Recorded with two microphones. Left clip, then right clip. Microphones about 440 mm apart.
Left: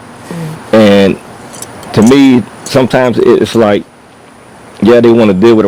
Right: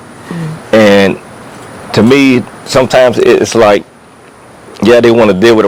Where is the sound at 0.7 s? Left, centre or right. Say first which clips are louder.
Even; right.